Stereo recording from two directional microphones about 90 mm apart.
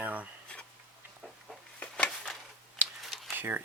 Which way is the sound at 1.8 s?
15° left (ahead or behind).